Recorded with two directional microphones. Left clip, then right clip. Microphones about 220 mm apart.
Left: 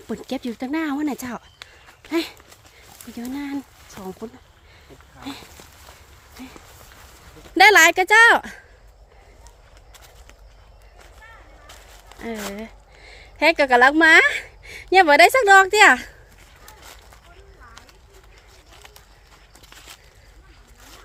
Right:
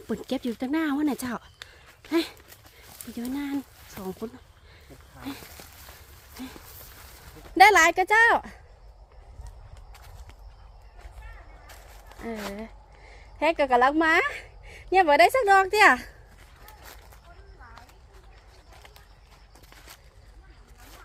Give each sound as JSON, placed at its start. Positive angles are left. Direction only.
{"t": 0.1, "sound": "speech", "side_deg": 0}
{"t": 7.5, "sound": "a woman's voice", "side_deg": 15}
{"t": 12.0, "sound": "speech", "side_deg": 10}